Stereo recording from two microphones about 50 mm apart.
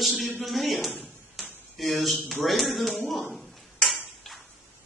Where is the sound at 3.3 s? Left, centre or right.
Centre.